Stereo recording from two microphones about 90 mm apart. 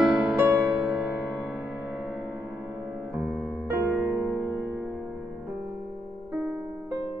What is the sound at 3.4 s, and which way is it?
Music, 5° left (ahead or behind).